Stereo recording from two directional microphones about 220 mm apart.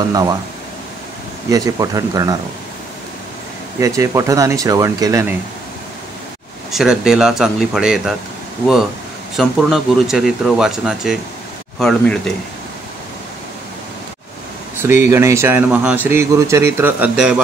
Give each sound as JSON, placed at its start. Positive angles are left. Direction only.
{"t": 0.1, "sound": "speech", "side_deg": -15}
{"t": 1.5, "sound": "speech", "side_deg": -15}
{"t": 3.8, "sound": "speech", "side_deg": -15}
{"t": 6.7, "sound": "speech", "side_deg": 0}
{"t": 9.4, "sound": "speech", "side_deg": 0}
{"t": 14.8, "sound": "speech", "side_deg": -10}